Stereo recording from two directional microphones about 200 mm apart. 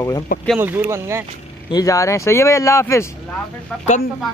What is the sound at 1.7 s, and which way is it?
Speech, 20° left (ahead or behind).